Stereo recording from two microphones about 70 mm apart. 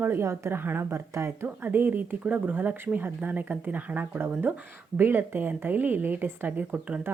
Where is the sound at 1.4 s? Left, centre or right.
Right.